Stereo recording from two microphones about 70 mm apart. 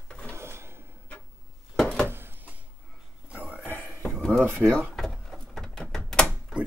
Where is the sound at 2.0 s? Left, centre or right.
Right.